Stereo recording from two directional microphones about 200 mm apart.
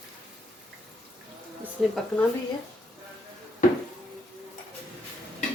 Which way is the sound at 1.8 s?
5° right (ahead or behind).